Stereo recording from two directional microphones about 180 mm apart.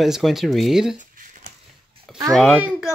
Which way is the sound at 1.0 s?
45° right (ahead or behind).